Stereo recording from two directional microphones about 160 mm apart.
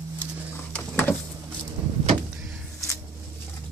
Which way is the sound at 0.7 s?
10° left (ahead or behind).